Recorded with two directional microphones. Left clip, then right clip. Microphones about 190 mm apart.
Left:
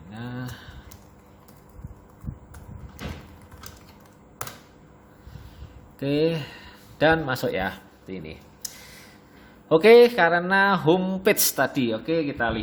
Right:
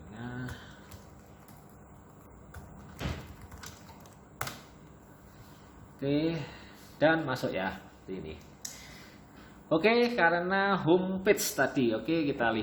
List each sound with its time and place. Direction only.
0.1 s a sound: 65° left (ahead or behind)
6.0 s a man's voice: 60° left (ahead or behind)
9.6 s a man's voice: 60° left (ahead or behind); by 12.5 s 35° left (ahead or behind)